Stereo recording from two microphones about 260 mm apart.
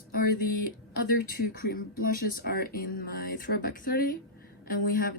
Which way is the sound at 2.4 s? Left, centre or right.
Left.